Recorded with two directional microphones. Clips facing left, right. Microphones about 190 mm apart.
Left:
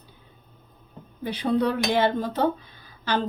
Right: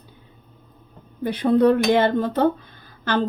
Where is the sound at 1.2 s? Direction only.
50° right (ahead or behind).